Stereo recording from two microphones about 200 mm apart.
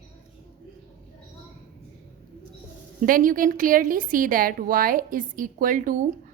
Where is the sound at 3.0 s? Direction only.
45° right (ahead or behind).